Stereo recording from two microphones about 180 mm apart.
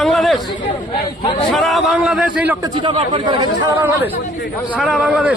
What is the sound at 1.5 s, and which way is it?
A man's voice, centre (ahead or behind).